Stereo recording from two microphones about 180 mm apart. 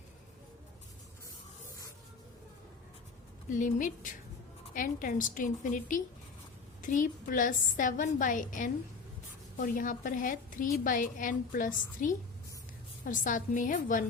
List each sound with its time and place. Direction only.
3.5 s a woman's voice: 45° left (ahead or behind)